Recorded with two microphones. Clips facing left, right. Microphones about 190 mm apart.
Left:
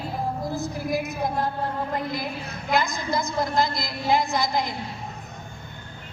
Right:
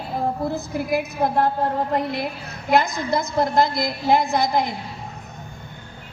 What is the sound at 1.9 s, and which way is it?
A woman's voice, 70° right (ahead or behind).